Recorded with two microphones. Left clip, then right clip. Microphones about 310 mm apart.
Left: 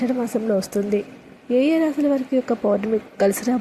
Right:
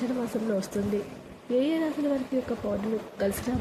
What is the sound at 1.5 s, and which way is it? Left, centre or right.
Speech, centre.